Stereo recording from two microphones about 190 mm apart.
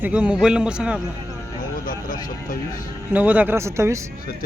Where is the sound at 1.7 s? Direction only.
50° left (ahead or behind).